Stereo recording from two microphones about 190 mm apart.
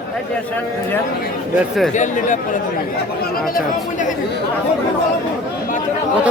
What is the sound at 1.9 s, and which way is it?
Speech, 40° left (ahead or behind).